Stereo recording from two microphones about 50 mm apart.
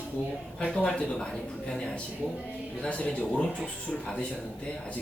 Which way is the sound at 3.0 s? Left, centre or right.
Left.